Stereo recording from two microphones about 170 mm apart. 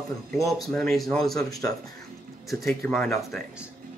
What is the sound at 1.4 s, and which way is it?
Speech, 20° left (ahead or behind).